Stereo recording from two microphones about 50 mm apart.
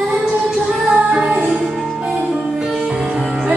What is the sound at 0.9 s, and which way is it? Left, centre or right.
Music, centre.